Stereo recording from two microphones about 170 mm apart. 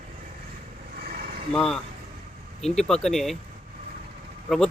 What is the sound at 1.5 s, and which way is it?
Speech, 5° left (ahead or behind).